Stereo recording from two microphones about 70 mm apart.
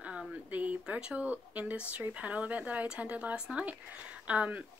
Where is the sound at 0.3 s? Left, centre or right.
Right.